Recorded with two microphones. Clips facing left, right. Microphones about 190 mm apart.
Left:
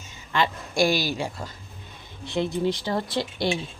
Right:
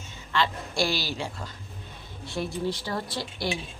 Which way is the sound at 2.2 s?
20° left (ahead or behind).